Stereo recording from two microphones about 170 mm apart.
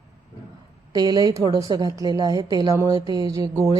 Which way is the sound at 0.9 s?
20° right (ahead or behind).